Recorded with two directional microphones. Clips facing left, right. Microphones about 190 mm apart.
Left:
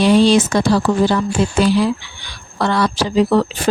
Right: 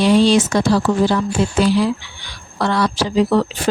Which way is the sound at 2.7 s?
60° left (ahead or behind).